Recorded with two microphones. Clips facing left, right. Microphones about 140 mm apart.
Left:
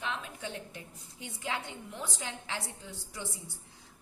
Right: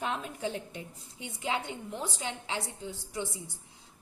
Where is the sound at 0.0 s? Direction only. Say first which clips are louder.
Right 5 dB; 40° right (ahead or behind).